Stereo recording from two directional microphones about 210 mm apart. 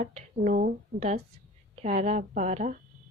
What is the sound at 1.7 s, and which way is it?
A woman's voice, 35° right (ahead or behind).